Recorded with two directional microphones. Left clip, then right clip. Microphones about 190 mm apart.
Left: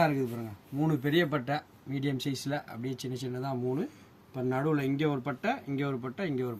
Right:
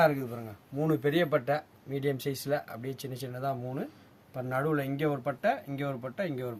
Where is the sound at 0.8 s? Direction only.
35° right (ahead or behind).